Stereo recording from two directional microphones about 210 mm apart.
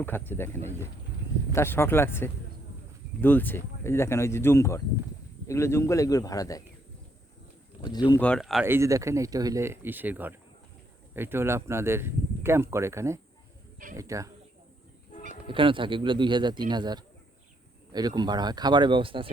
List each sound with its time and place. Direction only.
0.0 s speech: 10° left (ahead or behind)
7.8 s speech: 20° left (ahead or behind)
8.2 s speech: 5° left (ahead or behind)
8.6 s speech: 10° right (ahead or behind)
15.4 s speech: 25° right (ahead or behind)